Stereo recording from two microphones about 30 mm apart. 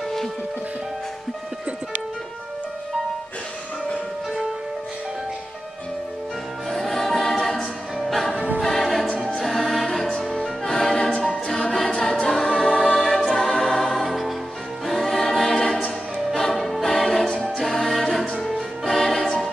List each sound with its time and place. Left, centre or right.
6.7 s music: centre
8.5 s choir: centre
9.4 s music: centre
10.7 s music: centre
11.9 s a capella: left
12.3 s choir: centre
12.9 s music: centre
15.5 s choir: centre
16.5 s music: centre